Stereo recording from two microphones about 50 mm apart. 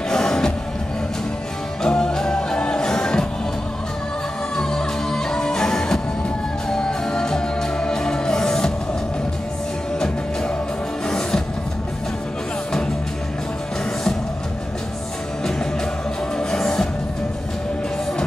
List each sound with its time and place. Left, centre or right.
0.1 s music: centre
1.8 s music: centre
4.6 s music: centre
9.9 s music: centre
16.3 s music: centre